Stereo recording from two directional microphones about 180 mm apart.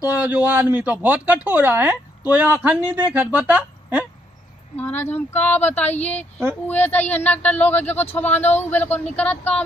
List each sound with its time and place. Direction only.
0.1 s speech: 10° right (ahead or behind)
4.7 s speech: 10° left (ahead or behind)
5.8 s speech: 40° left (ahead or behind)
6.0 s speech: 10° left (ahead or behind)